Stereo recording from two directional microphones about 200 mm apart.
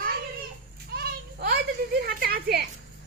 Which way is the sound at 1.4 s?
55° right (ahead or behind).